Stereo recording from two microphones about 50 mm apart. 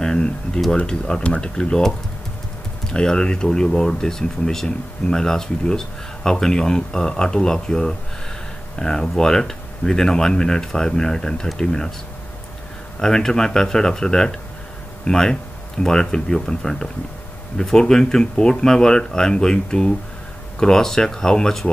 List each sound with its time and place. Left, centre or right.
0.0 s a sound: centre
0.7 s speech: centre
13.0 s speech: centre